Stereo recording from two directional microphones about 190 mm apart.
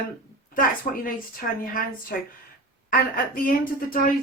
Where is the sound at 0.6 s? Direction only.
50° left (ahead or behind).